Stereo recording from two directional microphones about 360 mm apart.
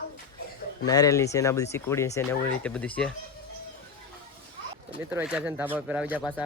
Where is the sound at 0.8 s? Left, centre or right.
Centre.